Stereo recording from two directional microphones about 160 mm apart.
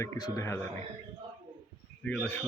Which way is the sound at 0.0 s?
20° left (ahead or behind).